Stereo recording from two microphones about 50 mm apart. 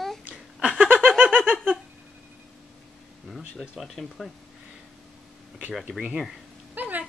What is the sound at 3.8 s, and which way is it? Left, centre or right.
Speech, centre.